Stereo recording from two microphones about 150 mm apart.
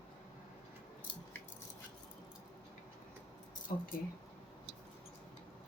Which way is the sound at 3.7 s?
60° left (ahead or behind).